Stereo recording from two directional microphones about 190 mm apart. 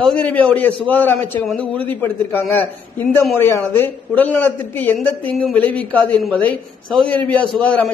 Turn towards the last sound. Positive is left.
turn(degrees=0)  # may be behind; listen again after turning